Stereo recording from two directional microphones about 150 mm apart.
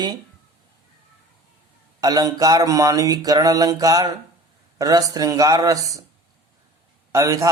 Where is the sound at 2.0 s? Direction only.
25° right (ahead or behind).